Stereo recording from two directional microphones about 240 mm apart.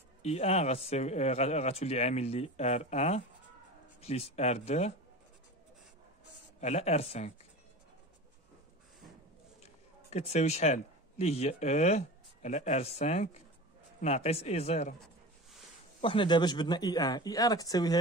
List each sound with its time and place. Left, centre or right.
0.2 s a man's voice: left
6.6 s a man's voice: left
9.6 s a man's voice: left
16.0 s speech: left